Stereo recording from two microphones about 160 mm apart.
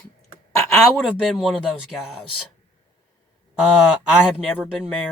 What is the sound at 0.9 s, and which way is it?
Speech, centre (ahead or behind).